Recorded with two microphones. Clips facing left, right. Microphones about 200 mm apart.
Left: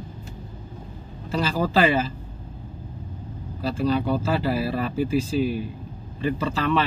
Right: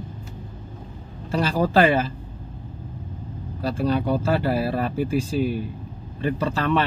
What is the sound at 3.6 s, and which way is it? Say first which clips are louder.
Speech: even; 50° right (ahead or behind).